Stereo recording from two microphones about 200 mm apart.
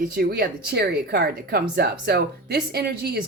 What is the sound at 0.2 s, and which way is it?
Speech, 50° right (ahead or behind).